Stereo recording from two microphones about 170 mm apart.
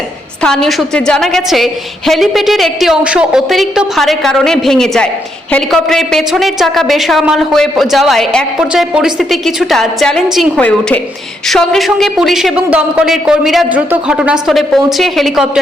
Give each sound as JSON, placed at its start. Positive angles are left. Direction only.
{"t": 0.4, "sound": "a woman's voice", "side_deg": 5}